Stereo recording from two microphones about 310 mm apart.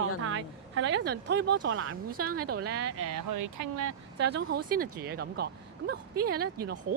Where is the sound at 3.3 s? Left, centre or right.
Right.